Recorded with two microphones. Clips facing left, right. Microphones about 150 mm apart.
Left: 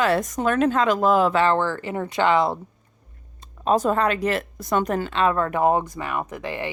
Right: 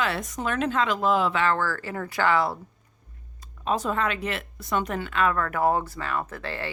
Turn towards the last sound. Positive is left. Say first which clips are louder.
# left 4 dB
turn(degrees=15)  # may be behind; listen again after turning